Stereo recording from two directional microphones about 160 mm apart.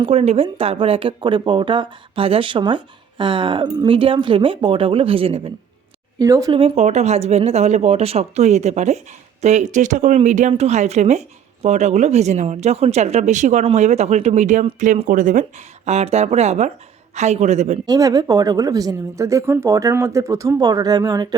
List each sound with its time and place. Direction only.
0.0 s speech: 35° right (ahead or behind)
6.1 s speech: 20° right (ahead or behind)
6.5 s speech: 40° right (ahead or behind)
17.8 s speech: 25° right (ahead or behind)